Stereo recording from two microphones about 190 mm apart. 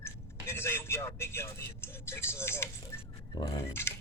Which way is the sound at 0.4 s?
15° left (ahead or behind).